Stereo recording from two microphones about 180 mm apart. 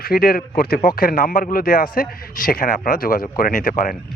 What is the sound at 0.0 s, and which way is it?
Speech, 55° left (ahead or behind).